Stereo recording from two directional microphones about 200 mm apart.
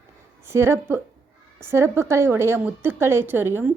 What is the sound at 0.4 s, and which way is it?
A woman's voice, 10° right (ahead or behind).